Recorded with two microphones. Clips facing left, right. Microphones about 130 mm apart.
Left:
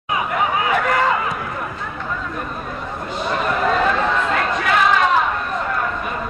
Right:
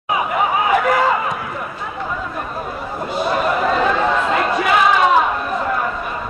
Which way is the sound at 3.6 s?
Centre (ahead or behind).